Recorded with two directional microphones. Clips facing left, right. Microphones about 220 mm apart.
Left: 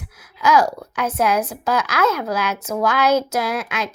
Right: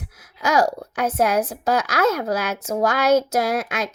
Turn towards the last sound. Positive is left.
turn(degrees=-45)  # may be behind; listen again after turning